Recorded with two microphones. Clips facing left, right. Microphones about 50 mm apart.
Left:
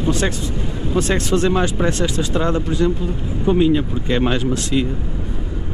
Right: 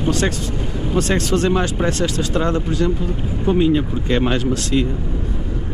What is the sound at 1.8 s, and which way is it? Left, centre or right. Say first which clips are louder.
Speech: left 1 dB; centre.